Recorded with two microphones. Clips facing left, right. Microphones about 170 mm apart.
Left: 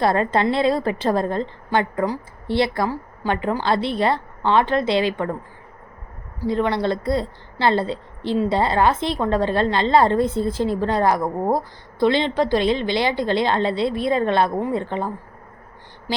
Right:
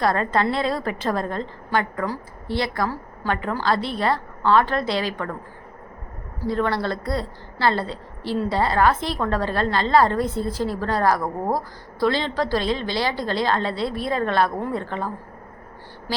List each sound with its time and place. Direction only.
0.0 s a woman's voice: 25° left (ahead or behind)
6.5 s a woman's voice: 20° left (ahead or behind)